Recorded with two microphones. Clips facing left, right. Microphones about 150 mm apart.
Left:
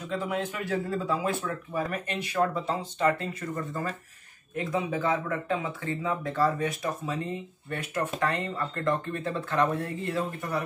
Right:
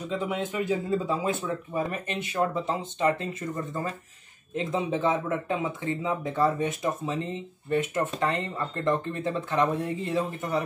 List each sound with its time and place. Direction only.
0.1 s speech: 20° right (ahead or behind)
4.6 s speech: 25° right (ahead or behind)